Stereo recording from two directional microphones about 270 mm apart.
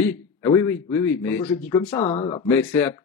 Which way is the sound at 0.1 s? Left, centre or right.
Centre.